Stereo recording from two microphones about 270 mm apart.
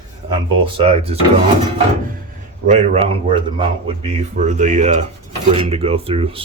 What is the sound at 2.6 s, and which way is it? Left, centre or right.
Speech, right.